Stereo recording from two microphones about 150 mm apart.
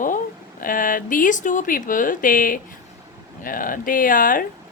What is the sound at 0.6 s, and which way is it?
A woman's voice, 65° left (ahead or behind).